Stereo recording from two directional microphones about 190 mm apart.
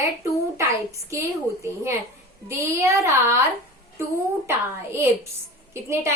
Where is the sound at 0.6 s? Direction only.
15° right (ahead or behind).